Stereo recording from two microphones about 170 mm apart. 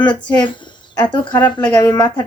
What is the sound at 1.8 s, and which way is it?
Speech, 20° left (ahead or behind).